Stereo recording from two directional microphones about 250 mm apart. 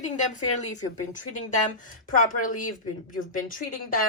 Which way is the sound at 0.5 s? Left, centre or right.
Left.